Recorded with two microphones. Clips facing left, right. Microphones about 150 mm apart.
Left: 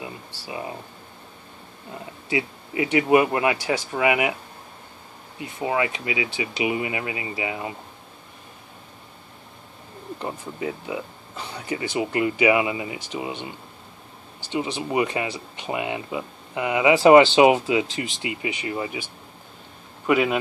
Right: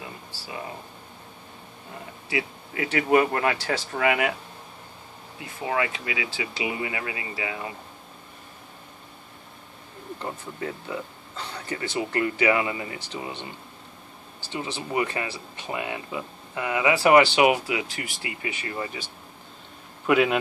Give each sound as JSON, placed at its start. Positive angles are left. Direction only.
{"t": 2.2, "sound": "speech", "side_deg": 20}
{"t": 5.4, "sound": "speech", "side_deg": 20}
{"t": 10.1, "sound": "speech", "side_deg": 15}
{"t": 14.5, "sound": "speech", "side_deg": 20}
{"t": 20.1, "sound": "a man's voice", "side_deg": 0}